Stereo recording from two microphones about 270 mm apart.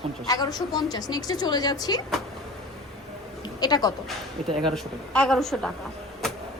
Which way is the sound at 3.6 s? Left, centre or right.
Centre.